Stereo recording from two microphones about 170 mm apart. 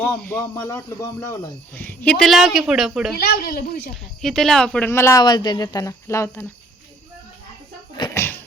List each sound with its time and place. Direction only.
0.0 s speech: 10° left (ahead or behind)
3.2 s speech: 70° left (ahead or behind)
4.2 s speech: centre (ahead or behind)
5.2 s speech: 25° left (ahead or behind)
7.9 s a sound: 25° left (ahead or behind)